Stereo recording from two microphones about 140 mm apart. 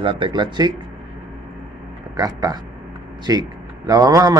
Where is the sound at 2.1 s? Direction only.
25° right (ahead or behind).